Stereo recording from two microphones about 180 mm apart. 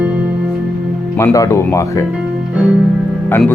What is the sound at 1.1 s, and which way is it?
Speech, 15° left (ahead or behind).